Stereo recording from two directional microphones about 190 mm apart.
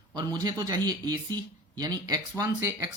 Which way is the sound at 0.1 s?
20° right (ahead or behind).